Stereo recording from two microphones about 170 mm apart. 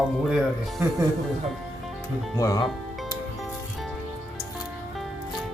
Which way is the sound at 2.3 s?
20° left (ahead or behind).